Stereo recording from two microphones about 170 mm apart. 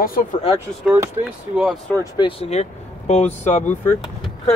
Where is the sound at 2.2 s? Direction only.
30° left (ahead or behind).